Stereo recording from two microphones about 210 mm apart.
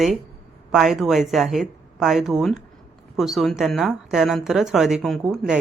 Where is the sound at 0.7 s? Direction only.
Centre (ahead or behind).